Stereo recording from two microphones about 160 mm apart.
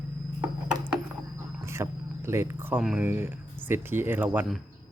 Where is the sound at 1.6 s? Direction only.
15° right (ahead or behind).